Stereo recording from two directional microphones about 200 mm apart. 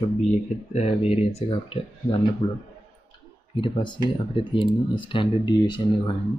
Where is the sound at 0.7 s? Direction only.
30° left (ahead or behind).